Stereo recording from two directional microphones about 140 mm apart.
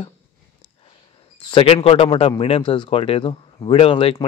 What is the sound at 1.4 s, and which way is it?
A man's voice, 35° left (ahead or behind).